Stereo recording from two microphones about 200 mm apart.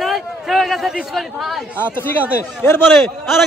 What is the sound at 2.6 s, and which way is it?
Speech, 10° left (ahead or behind).